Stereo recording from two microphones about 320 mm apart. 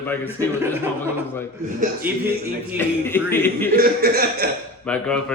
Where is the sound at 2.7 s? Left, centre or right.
Centre.